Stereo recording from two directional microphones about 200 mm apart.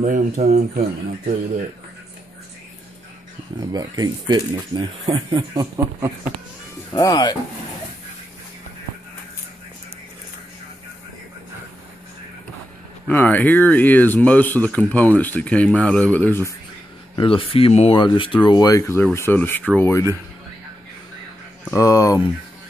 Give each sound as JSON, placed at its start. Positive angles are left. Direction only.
{"t": 0.0, "sound": "speech", "side_deg": -35}
{"t": 3.7, "sound": "speech", "side_deg": -20}
{"t": 6.9, "sound": "speech", "side_deg": 20}
{"t": 13.0, "sound": "speech", "side_deg": 10}
{"t": 17.1, "sound": "speech", "side_deg": 25}
{"t": 21.7, "sound": "speech", "side_deg": 15}